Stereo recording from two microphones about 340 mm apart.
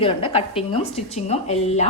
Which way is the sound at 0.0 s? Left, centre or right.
Centre.